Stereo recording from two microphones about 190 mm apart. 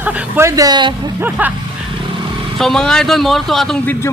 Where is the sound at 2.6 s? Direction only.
Centre (ahead or behind).